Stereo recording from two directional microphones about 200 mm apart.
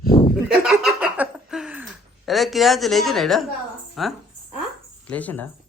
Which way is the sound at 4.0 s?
Centre (ahead or behind).